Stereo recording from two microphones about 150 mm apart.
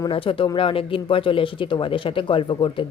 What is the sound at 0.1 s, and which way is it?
Speech, 35° left (ahead or behind).